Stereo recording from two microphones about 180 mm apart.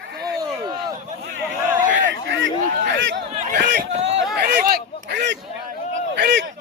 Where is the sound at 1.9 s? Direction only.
90° right.